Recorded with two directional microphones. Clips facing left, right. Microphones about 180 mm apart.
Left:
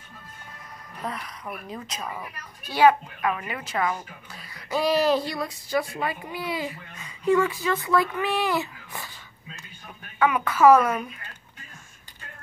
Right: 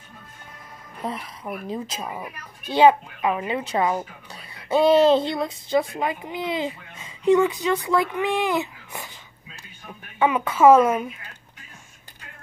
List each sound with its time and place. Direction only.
1.0 s a woman's voice: 25° right (ahead or behind)
10.1 s speech: 20° right (ahead or behind)